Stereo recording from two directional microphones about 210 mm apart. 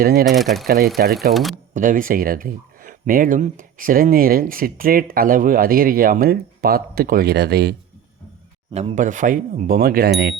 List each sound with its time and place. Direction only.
0.0 s speech: 45° right (ahead or behind)
0.3 s speech: centre (ahead or behind)
1.7 s speech: 40° right (ahead or behind)
8.7 s speech: 30° right (ahead or behind); by 10.3 s 50° right (ahead or behind)